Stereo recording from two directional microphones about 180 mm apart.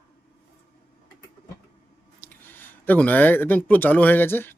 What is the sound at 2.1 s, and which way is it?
Speech, 10° left (ahead or behind).